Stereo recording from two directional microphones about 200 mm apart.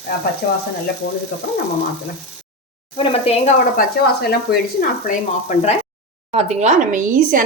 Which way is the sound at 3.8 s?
55° left (ahead or behind).